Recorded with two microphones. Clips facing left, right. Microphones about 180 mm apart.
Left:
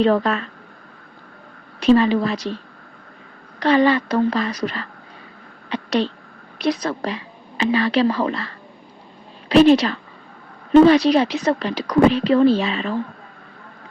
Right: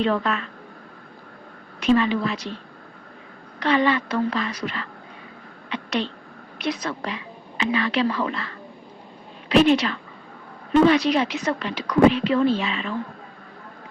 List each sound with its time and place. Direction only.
0.0 s a woman's voice: 35° left (ahead or behind)
1.8 s a woman's voice: 35° left (ahead or behind)
3.6 s a woman's voice: 35° left (ahead or behind)
5.6 s a sound: 35° left (ahead or behind)
6.6 s a woman's voice: 35° left (ahead or behind)